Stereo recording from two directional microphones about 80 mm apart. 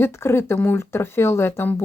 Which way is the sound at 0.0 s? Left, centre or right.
Left.